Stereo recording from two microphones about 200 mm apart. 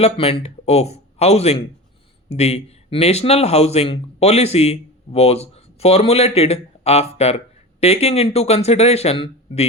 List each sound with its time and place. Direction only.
0.0 s a man's voice: 30° left (ahead or behind)